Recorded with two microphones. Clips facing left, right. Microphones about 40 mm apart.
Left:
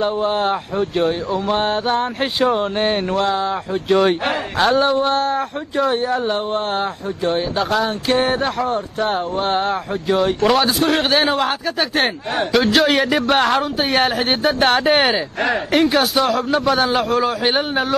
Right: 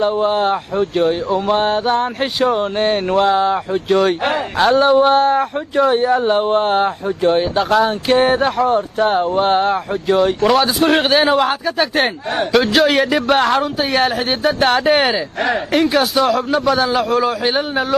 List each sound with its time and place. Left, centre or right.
0.0 s speech: centre
3.1 s speech: centre
3.9 s speech: centre
4.9 s speech: centre
10.8 s a man's voice: centre
11.1 s speech: centre